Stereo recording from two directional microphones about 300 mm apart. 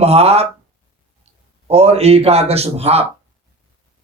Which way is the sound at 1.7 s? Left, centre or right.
Centre.